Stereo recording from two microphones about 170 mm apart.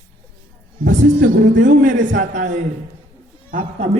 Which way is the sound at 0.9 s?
50° right (ahead or behind).